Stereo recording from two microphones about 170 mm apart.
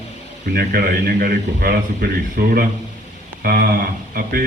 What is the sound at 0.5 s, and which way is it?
A man's voice, 65° right (ahead or behind).